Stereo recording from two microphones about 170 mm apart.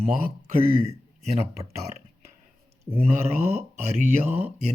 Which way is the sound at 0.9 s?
40° right (ahead or behind).